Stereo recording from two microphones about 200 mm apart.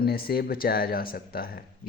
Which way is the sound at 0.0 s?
50° left (ahead or behind).